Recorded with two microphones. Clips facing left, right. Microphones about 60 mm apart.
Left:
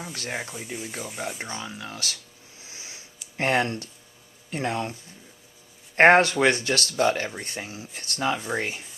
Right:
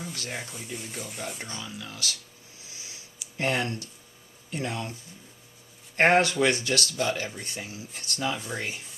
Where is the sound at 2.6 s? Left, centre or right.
Left.